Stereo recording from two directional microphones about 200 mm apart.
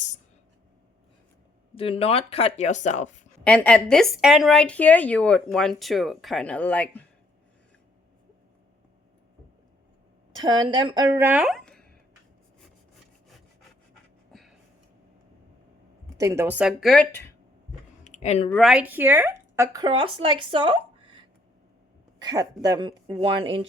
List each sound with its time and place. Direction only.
1.7 s speech: 30° left (ahead or behind)
3.4 s a woman's voice: 5° left (ahead or behind)
10.4 s speech: 20° right (ahead or behind); by 11.9 s 5° left (ahead or behind)
16.1 s a woman's voice: 15° right (ahead or behind); by 17.2 s 10° left (ahead or behind)
18.0 s clicking: 35° left (ahead or behind)
18.5 s speech: 5° right (ahead or behind); by 20.7 s 25° right (ahead or behind)
22.2 s speech: 20° right (ahead or behind)